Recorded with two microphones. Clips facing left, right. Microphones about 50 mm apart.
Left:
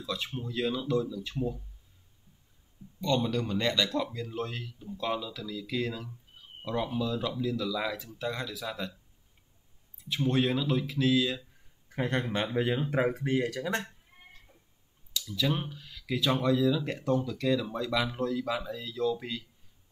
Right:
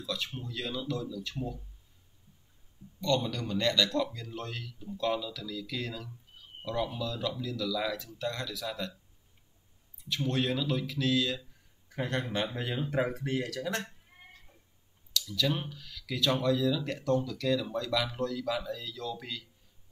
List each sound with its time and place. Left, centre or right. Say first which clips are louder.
0.0 s speech: left 1 dB; left
3.0 s speech: left 2 dB; centre
10.0 s speech: left 3 dB; centre
15.2 s speech: left 2 dB; centre
15.7 s speech: left 4 dB; left